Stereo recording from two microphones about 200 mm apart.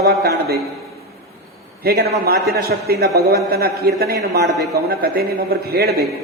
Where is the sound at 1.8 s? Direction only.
50° right (ahead or behind).